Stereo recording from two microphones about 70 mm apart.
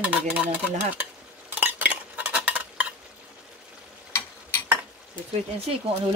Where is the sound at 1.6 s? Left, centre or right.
Right.